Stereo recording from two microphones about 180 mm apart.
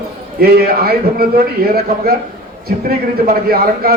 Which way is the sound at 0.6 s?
55° right (ahead or behind).